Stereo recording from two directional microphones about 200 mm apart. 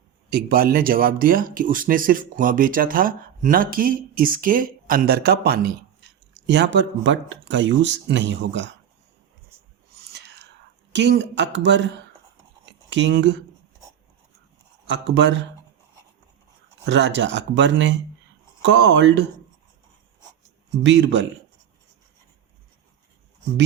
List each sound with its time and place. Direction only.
0.3 s speech: 50° right (ahead or behind)
10.1 s whispering: 60° right (ahead or behind)
10.9 s speech: 60° right (ahead or behind)
12.9 s speech: 65° right (ahead or behind)
14.8 s speech: 65° right (ahead or behind)
16.8 s speech: 60° right (ahead or behind)
20.8 s speech: 65° right (ahead or behind)